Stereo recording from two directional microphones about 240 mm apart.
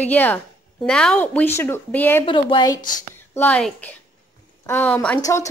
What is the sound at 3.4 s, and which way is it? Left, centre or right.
Speech, centre.